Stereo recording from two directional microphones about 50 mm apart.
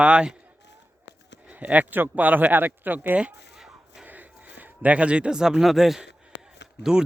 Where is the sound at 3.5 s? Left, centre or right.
Centre.